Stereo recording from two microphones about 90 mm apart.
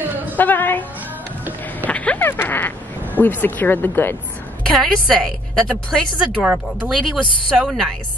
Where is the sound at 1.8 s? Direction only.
15° left (ahead or behind).